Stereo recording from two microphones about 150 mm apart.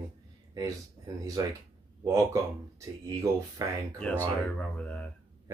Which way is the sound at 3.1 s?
20° right (ahead or behind).